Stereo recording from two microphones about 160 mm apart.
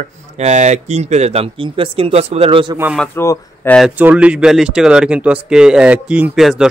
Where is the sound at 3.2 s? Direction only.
20° left (ahead or behind).